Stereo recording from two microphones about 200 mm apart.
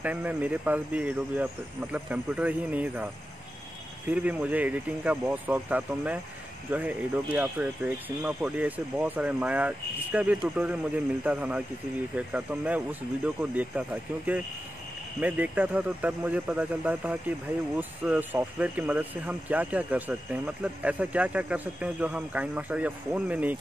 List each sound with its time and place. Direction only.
0.0 s speech: 5° right (ahead or behind)
4.1 s speech: 5° right (ahead or behind)